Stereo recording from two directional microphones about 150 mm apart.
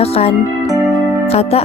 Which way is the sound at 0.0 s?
40° left (ahead or behind).